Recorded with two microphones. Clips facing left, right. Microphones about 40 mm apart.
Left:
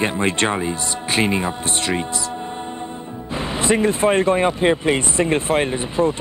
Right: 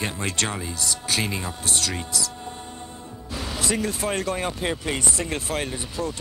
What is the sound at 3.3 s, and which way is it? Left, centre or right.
Speech, left.